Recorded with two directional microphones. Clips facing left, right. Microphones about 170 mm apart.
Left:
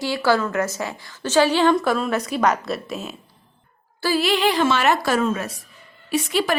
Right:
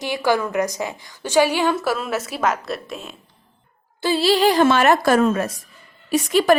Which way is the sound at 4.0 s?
25° right (ahead or behind).